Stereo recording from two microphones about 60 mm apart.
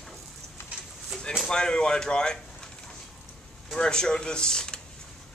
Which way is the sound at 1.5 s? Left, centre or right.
Centre.